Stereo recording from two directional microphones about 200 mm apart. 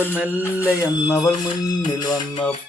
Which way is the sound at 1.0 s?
20° left (ahead or behind).